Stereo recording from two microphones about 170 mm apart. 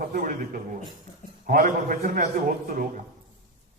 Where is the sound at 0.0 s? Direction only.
55° right (ahead or behind).